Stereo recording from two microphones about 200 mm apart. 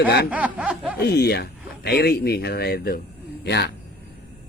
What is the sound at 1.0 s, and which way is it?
Speech, 55° left (ahead or behind).